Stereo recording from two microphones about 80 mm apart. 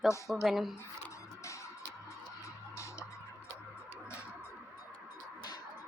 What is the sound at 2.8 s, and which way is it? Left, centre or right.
Music, left.